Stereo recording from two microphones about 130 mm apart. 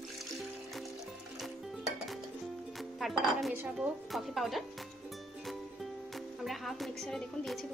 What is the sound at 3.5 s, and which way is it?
Speech, 10° right (ahead or behind).